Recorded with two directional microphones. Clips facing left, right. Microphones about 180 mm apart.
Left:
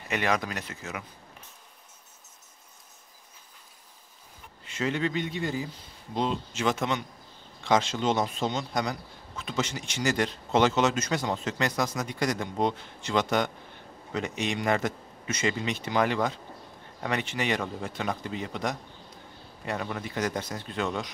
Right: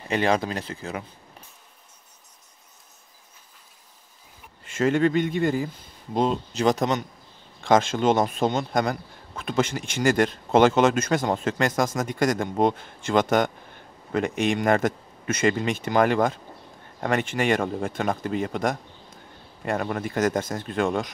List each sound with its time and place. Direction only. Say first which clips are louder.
0.1 s speech: right 5 dB; 30° right (ahead or behind)
4.6 s a man's voice: right 8 dB; 50° right (ahead or behind)